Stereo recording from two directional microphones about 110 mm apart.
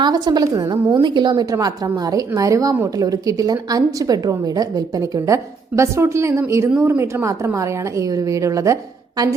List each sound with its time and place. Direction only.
0.0 s a woman's voice: 35° right (ahead or behind)